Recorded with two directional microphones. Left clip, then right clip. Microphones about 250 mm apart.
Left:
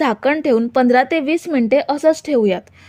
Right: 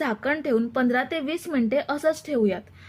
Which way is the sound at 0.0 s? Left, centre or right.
Left.